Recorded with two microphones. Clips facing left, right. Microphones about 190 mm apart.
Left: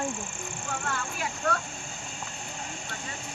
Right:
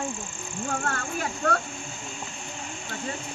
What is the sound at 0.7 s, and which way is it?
Speech, 45° right (ahead or behind).